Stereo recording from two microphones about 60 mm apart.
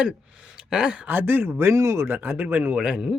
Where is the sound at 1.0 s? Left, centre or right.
Right.